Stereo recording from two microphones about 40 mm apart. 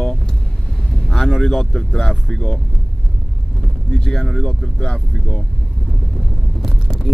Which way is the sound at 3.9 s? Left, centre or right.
Centre.